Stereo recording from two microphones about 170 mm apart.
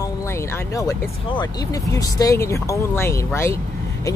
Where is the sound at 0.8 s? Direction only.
20° left (ahead or behind).